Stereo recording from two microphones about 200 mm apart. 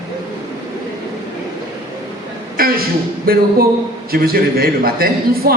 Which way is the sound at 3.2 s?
50° right (ahead or behind).